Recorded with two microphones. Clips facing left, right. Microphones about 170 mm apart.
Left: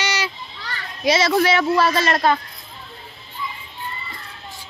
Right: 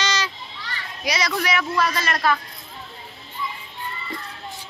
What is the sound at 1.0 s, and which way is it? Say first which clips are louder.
A man's voice: left 8 dB; 25° left (ahead or behind).